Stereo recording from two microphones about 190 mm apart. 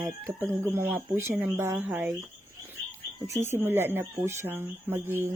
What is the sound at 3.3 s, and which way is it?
Speech, 15° right (ahead or behind).